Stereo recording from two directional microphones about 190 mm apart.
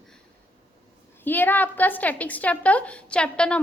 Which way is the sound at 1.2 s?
10° left (ahead or behind).